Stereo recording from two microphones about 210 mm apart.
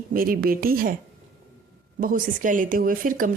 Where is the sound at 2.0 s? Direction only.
40° right (ahead or behind).